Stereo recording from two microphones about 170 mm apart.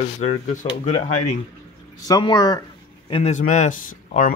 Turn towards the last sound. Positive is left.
turn(degrees=45)  # may be behind; listen again after turning